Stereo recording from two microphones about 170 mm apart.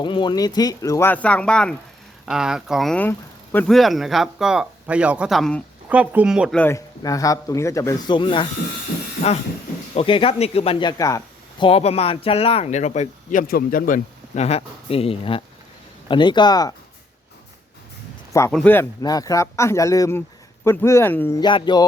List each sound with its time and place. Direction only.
0.0 s speech: 25° left (ahead or behind); by 5.6 s 5° left (ahead or behind)
5.9 s speech: 10° right (ahead or behind)
6.6 s speech: 15° left (ahead or behind)
9.9 s speech: 30° left (ahead or behind)
11.6 s speech: 35° left (ahead or behind)
13.5 s speech: 60° left (ahead or behind); by 16.7 s 25° left (ahead or behind)
18.5 s speech: 10° left (ahead or behind)
19.0 s speech: 20° left (ahead or behind)
21.4 s speech: 25° left (ahead or behind)